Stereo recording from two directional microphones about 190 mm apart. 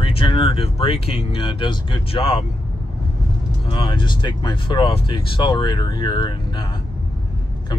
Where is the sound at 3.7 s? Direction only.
25° left (ahead or behind).